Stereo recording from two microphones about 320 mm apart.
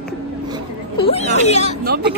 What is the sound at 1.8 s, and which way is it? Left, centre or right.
Speech, right.